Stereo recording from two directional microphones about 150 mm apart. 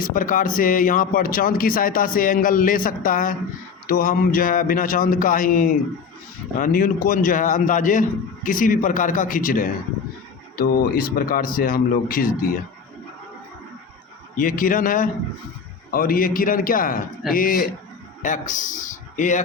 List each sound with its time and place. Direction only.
0.0 s a man's voice: 65° left (ahead or behind)
10.6 s a man's voice: 80° left
14.3 s a man's voice: 70° left (ahead or behind)
18.2 s a man's voice: 60° left (ahead or behind)